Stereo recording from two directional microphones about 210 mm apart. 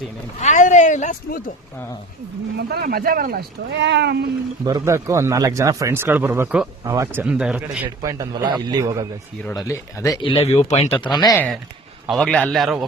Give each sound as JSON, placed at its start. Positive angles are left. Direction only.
{"t": 0.3, "sound": "speech", "side_deg": 35}
{"t": 2.6, "sound": "speech", "side_deg": -50}
{"t": 4.6, "sound": "a man's voice", "side_deg": -15}
{"t": 8.0, "sound": "a man's voice", "side_deg": -20}
{"t": 9.4, "sound": "speech", "side_deg": 15}
{"t": 12.0, "sound": "a man's voice", "side_deg": 0}